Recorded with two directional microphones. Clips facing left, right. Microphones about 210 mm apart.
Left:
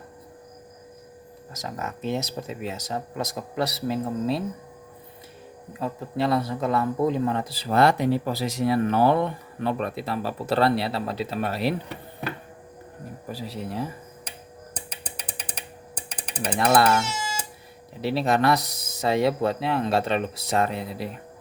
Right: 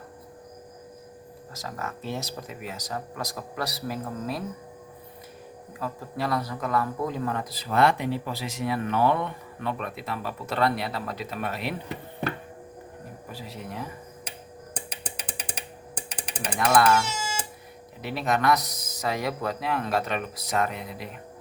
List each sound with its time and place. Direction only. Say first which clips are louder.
1.5 s speech: left 2 dB; 20° left (ahead or behind)
5.8 s speech: left 5 dB; 25° left (ahead or behind)
13.2 s speech: left 6 dB; 35° left (ahead or behind)
14.8 s mechanisms: right 1 dB; 10° right (ahead or behind)
16.6 s speech: left 1 dB; 35° left (ahead or behind)
18.0 s speech: left 4 dB; 30° left (ahead or behind)